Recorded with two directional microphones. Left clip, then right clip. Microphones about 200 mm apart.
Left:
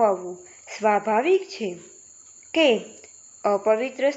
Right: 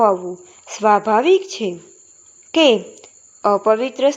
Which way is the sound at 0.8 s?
35° right (ahead or behind).